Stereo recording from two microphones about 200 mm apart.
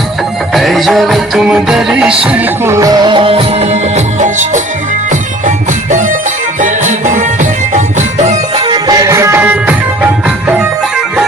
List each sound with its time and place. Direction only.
0.5 s music: centre (ahead or behind)